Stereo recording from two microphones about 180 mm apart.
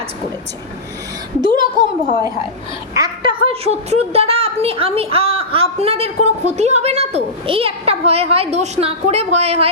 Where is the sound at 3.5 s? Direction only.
35° right (ahead or behind).